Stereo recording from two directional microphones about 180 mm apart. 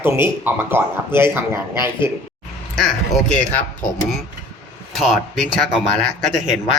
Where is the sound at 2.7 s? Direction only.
Centre (ahead or behind).